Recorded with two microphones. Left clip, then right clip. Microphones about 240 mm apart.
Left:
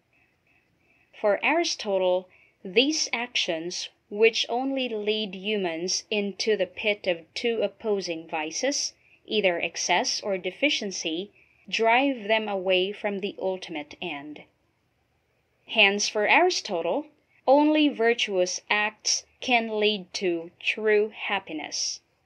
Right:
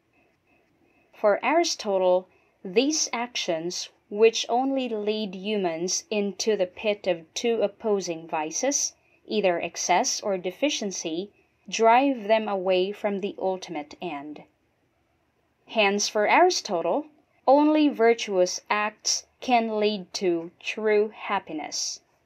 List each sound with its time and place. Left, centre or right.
1.1 s a woman's voice: right
15.6 s a woman's voice: right